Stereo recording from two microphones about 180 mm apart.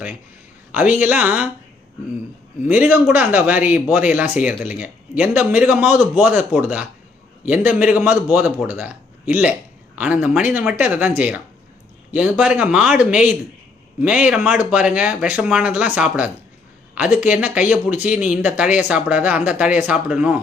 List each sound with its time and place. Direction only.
0.7 s speech: 10° right (ahead or behind)
2.6 s speech: 10° right (ahead or behind)